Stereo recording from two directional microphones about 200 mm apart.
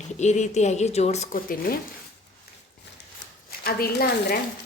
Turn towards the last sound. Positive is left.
turn(degrees=50)  # may be behind; listen again after turning